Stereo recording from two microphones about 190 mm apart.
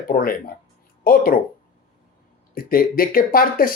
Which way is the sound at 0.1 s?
50° left (ahead or behind).